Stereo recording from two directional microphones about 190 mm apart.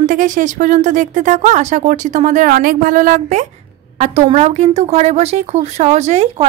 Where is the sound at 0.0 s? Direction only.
40° right (ahead or behind).